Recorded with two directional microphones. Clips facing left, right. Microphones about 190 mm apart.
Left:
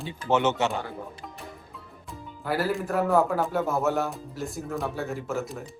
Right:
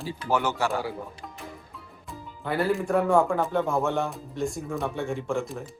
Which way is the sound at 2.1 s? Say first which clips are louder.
Left 1 dB; 5° left (ahead or behind).